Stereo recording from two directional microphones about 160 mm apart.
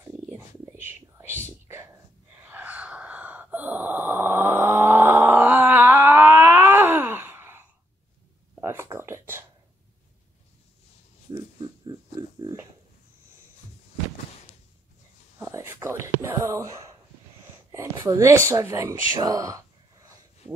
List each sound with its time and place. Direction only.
0.0 s whispering: 15° right (ahead or behind)
2.4 s gasp: 10° right (ahead or behind)
8.5 s a sound: 15° right (ahead or behind)
11.6 s pig: 30° right (ahead or behind)
15.3 s whispering: 20° right (ahead or behind)
17.6 s speech: 20° right (ahead or behind)